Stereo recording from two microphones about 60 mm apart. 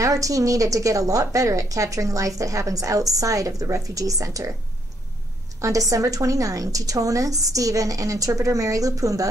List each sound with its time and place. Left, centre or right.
0.0 s a woman's voice: right
5.6 s a woman's voice: right